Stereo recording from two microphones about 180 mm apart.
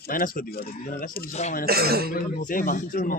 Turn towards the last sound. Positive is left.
turn(degrees=50)  # may be behind; listen again after turning